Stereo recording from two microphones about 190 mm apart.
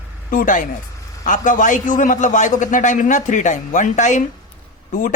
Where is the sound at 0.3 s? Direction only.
45° left (ahead or behind).